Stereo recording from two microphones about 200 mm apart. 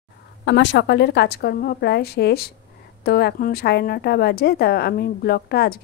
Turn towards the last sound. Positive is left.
turn(degrees=50)  # may be behind; listen again after turning